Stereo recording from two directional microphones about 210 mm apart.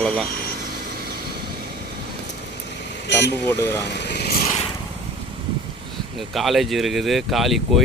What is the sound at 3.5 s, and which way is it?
Speech, 10° left (ahead or behind).